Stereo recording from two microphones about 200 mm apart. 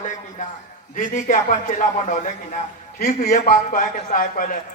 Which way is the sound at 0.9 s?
40° left (ahead or behind).